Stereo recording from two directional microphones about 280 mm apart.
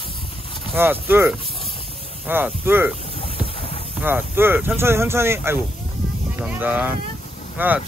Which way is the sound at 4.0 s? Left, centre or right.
Centre.